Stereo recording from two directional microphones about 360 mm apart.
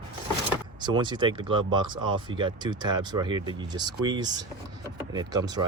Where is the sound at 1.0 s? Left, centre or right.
Centre.